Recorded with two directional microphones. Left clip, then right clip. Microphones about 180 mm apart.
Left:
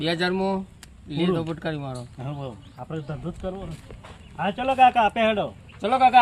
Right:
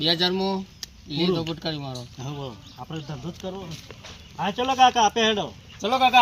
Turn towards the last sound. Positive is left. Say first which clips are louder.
# left 2 dB
turn(degrees=-15)  # may be behind; listen again after turning